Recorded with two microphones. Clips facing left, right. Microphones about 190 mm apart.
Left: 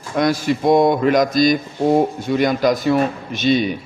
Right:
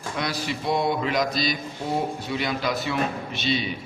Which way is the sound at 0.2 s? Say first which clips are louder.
Left 12 dB; 45° left (ahead or behind).